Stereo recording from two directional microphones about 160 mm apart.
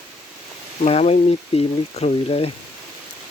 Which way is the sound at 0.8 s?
40° left (ahead or behind).